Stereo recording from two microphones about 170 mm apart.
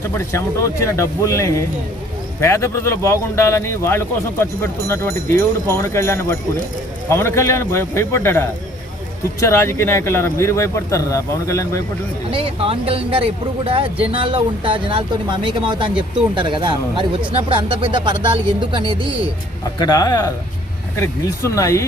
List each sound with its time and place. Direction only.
0.1 s speech: 15° left (ahead or behind)
12.3 s speech: 35° right (ahead or behind)
19.8 s speech: 25° left (ahead or behind)